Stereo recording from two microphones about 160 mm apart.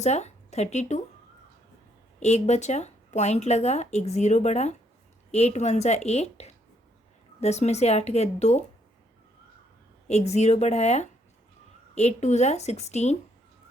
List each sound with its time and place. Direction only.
0.0 s speech: 45° left (ahead or behind)
2.2 s speech: 45° left (ahead or behind)
10.1 s speech: 45° left (ahead or behind)